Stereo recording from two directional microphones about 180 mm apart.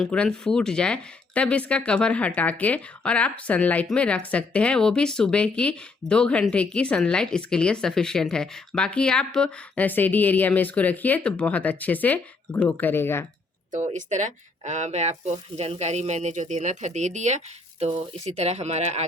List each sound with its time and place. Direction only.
0.0 s speech: 5° left (ahead or behind)
13.7 s speech: 40° right (ahead or behind)